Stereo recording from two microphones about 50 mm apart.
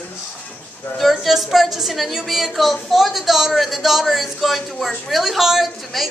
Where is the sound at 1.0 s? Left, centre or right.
Centre.